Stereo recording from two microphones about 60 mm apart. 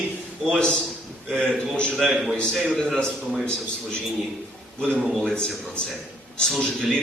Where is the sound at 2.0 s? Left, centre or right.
Centre.